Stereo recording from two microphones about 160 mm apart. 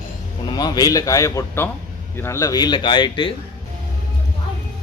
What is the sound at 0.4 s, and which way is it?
A man's voice, 25° left (ahead or behind).